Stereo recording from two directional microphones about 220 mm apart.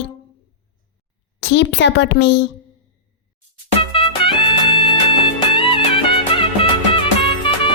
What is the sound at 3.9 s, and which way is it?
Music, 25° left (ahead or behind).